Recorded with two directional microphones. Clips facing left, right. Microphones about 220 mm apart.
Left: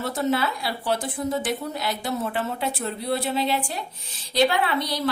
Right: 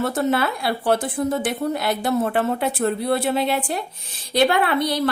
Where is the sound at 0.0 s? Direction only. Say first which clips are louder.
Right 3 dB; 55° right (ahead or behind).